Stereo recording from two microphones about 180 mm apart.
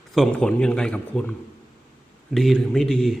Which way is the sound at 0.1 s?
5° left (ahead or behind).